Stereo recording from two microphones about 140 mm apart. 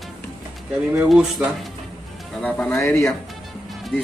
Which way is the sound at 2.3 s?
10° left (ahead or behind).